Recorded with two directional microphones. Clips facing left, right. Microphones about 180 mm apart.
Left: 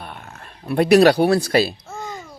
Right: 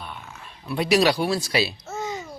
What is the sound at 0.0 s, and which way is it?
Speech, 55° left (ahead or behind).